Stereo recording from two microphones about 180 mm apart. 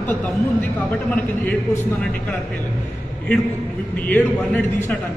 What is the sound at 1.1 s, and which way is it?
Speech, 10° left (ahead or behind).